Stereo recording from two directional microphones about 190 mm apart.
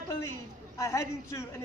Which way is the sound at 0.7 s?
15° left (ahead or behind).